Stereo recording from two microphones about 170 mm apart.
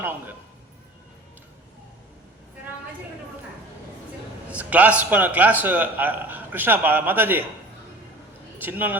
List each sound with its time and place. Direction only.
4.4 s a man's voice: 10° right (ahead or behind)
8.5 s a man's voice: 10° right (ahead or behind)